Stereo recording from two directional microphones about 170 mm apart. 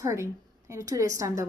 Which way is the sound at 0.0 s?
15° right (ahead or behind).